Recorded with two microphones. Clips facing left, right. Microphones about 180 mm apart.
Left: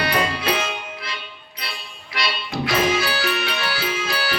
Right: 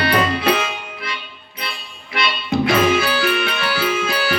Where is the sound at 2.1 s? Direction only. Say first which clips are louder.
Right 6 dB; 55° right (ahead or behind).